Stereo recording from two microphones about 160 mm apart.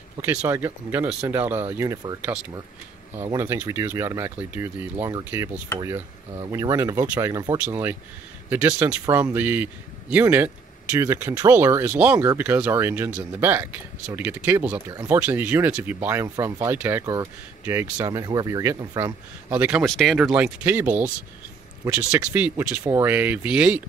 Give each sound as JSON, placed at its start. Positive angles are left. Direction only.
{"t": 0.2, "sound": "a man's voice", "side_deg": -15}
{"t": 15.1, "sound": "a man's voice", "side_deg": -10}
{"t": 19.8, "sound": "a man's voice", "side_deg": 5}